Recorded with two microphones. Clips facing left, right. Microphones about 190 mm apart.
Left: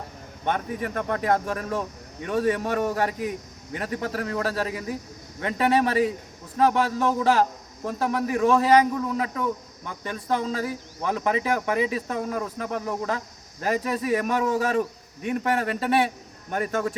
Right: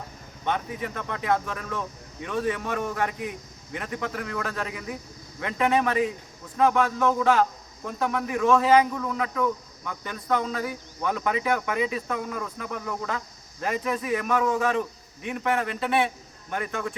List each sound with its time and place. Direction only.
0.4 s a man's voice: 50° left (ahead or behind)
12.8 s speech: 20° left (ahead or behind)
13.1 s a man's voice: 35° left (ahead or behind)